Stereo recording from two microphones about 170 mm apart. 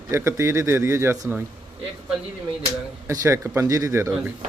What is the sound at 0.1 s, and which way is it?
Speech, 15° right (ahead or behind).